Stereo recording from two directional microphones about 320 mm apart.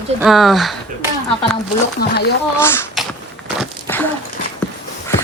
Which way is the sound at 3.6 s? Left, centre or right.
Centre.